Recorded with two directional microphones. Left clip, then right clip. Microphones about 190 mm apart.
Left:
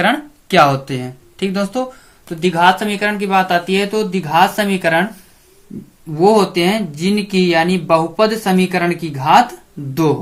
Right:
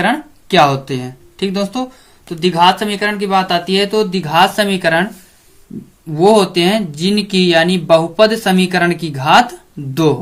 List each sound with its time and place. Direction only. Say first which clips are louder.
0.0 s speech: even; 5° right (ahead or behind)
6.1 s speech: right 2 dB; 25° right (ahead or behind)